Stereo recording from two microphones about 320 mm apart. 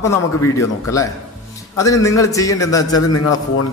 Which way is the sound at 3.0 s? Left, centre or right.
Left.